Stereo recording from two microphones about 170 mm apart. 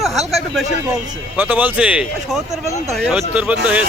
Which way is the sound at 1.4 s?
10° right (ahead or behind).